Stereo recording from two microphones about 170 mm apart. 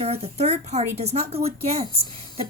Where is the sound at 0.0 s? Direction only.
35° right (ahead or behind).